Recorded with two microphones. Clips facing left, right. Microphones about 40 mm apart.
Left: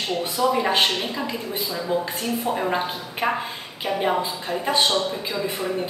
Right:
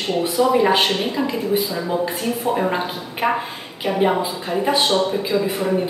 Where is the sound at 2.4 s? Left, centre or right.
Centre.